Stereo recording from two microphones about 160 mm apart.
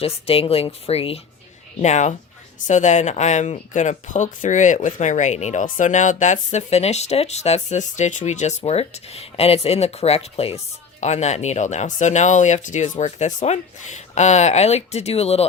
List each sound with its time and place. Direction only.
0.0 s a woman's voice: 35° left (ahead or behind)